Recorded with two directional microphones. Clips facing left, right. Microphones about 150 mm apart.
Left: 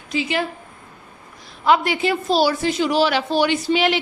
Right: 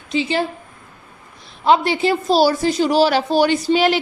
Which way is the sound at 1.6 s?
30° right (ahead or behind).